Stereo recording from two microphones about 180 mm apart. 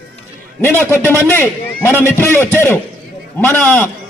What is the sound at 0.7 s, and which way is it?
Speech, 15° right (ahead or behind).